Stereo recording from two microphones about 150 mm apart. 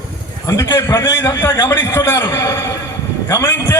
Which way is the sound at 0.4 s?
25° left (ahead or behind).